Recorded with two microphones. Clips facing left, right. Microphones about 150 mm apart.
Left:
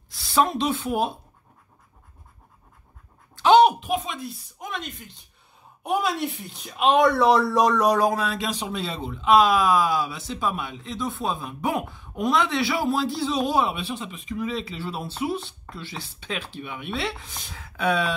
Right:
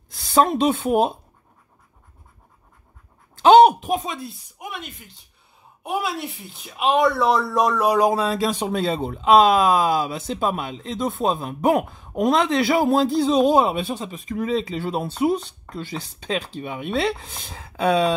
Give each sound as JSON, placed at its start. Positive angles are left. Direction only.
{"t": 0.1, "sound": "speech", "side_deg": -45}
{"t": 3.4, "sound": "a sound", "side_deg": -45}
{"t": 4.6, "sound": "speech", "side_deg": -10}
{"t": 8.1, "sound": "speech", "side_deg": -30}
{"t": 8.5, "sound": "speech", "side_deg": -50}